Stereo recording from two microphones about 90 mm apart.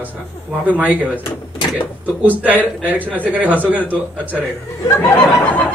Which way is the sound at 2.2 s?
15° right (ahead or behind).